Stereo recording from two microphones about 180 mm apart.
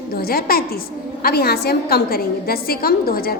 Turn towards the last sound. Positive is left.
turn(degrees=55)  # may be behind; listen again after turning